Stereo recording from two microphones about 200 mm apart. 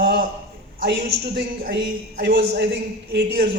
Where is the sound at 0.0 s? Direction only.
60° right (ahead or behind).